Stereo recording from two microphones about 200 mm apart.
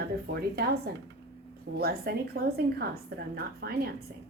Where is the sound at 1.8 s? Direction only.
50° right (ahead or behind).